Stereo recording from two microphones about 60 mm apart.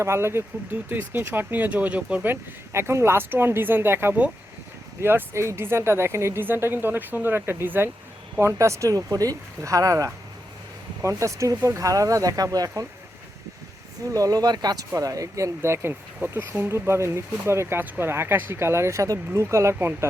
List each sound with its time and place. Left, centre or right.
0.0 s speech: right
2.7 s speech: right
6.4 s speech: right
8.5 s speech: right
9.1 s speech: right
9.6 s speech: right
11.2 s speech: right
14.1 s speech: right
15.6 s speech: right
16.6 s speech: right
19.3 s speech: right